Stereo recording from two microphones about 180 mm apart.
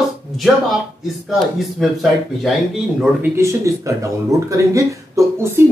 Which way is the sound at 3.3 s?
15° right (ahead or behind).